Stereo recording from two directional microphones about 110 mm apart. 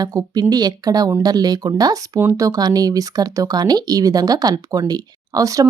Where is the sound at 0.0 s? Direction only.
35° right (ahead or behind).